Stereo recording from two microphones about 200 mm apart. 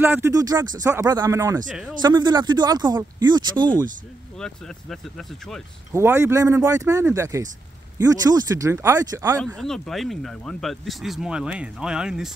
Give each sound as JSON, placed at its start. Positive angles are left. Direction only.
{"t": 0.0, "sound": "speech", "side_deg": -10}
{"t": 4.4, "sound": "speech", "side_deg": 0}
{"t": 5.9, "sound": "speech", "side_deg": -15}
{"t": 9.6, "sound": "speech", "side_deg": 0}